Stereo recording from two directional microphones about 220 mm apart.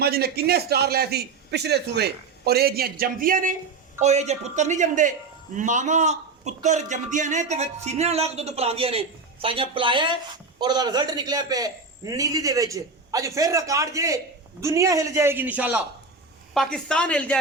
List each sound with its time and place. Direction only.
0.0 s a man's voice: 45° right (ahead or behind); by 15.8 s 5° right (ahead or behind)
16.6 s speech: 5° left (ahead or behind)